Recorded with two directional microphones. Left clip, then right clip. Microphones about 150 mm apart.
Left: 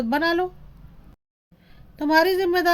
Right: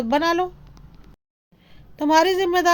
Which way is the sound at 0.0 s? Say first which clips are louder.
Right 2 dB; 15° right (ahead or behind).